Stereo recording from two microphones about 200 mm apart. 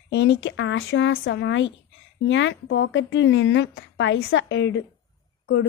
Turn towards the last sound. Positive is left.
turn(degrees=60)  # may be behind; listen again after turning